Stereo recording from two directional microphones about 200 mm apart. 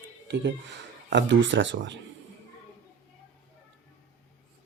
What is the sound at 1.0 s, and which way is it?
Speech, 65° right (ahead or behind).